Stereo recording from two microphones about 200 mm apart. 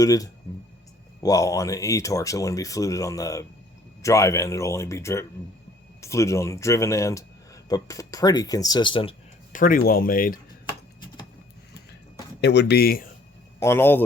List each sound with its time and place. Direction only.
0.0 s speech: 15° left (ahead or behind)
9.5 s speech: 45° left (ahead or behind)
12.4 s speech: 55° left (ahead or behind)
13.6 s speech: 10° left (ahead or behind)